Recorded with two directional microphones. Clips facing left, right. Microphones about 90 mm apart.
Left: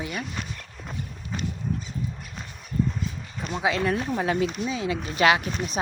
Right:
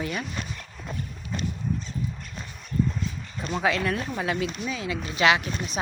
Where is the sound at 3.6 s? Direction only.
30° left (ahead or behind).